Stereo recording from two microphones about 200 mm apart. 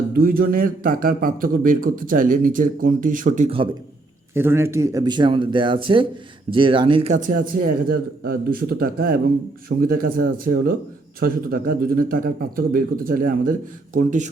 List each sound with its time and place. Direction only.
0.2 s a man's voice: 45° right (ahead or behind)
4.4 s a man's voice: 10° right (ahead or behind); by 14.3 s 40° right (ahead or behind)